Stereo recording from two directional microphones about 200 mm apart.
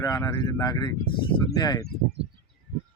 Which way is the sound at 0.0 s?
15° left (ahead or behind).